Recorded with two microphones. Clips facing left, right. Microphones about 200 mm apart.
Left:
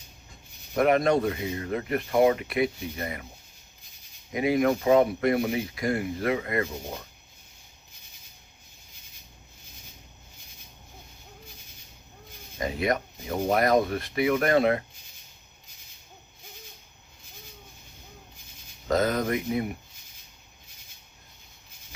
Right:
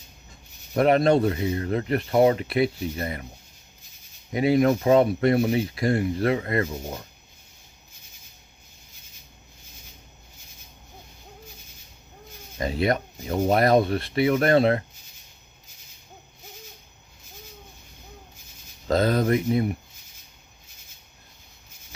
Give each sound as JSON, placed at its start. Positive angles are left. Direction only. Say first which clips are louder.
{"t": 0.7, "sound": "speech", "louder": "right 3 dB", "side_deg": -30}
{"t": 4.3, "sound": "speech", "louder": "right 3 dB", "side_deg": -30}
{"t": 12.5, "sound": "speech", "louder": "right 3 dB", "side_deg": -30}
{"t": 18.9, "sound": "speech", "louder": "right 4 dB", "side_deg": -30}